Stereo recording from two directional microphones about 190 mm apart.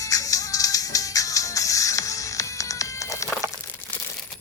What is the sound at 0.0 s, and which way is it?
Music, 20° left (ahead or behind).